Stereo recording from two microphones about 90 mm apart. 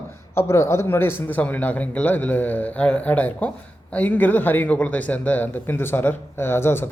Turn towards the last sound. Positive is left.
turn(degrees=25)  # may be behind; listen again after turning